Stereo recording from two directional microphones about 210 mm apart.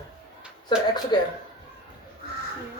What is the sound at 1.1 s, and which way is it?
Speech, 20° left (ahead or behind).